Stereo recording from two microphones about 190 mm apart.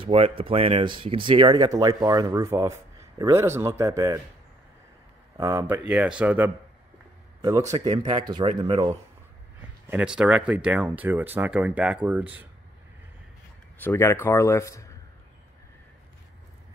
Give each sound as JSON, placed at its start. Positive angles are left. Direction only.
{"t": 0.0, "sound": "speech", "side_deg": -30}
{"t": 5.4, "sound": "speech", "side_deg": -15}
{"t": 5.9, "sound": "speech", "side_deg": -5}
{"t": 9.8, "sound": "speech", "side_deg": -5}
{"t": 13.7, "sound": "a man's voice", "side_deg": 10}